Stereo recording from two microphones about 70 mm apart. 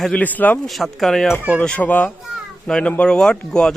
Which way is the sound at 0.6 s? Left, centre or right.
Centre.